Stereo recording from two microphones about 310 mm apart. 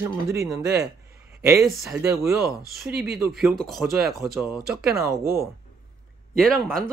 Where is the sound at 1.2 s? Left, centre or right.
Centre.